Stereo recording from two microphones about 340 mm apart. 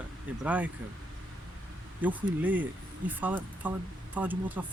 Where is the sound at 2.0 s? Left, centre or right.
Centre.